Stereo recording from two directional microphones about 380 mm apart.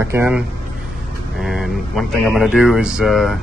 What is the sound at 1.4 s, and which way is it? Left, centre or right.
Mantra, centre.